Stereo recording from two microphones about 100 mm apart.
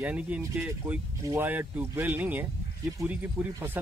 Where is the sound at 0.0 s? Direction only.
15° right (ahead or behind).